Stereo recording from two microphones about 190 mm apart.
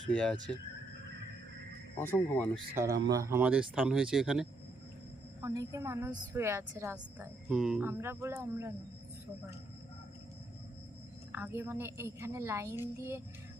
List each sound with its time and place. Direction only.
0.1 s speech: 5° left (ahead or behind)
2.0 s speech: 10° left (ahead or behind)
3.0 s speech: 20° right (ahead or behind); by 4.4 s centre (ahead or behind)
5.4 s a woman's voice: 20° right (ahead or behind)
11.3 s a woman's voice: 10° right (ahead or behind)